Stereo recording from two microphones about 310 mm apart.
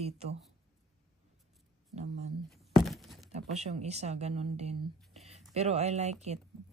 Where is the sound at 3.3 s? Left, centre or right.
Right.